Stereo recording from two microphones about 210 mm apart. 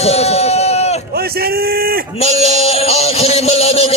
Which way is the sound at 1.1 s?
45° right (ahead or behind).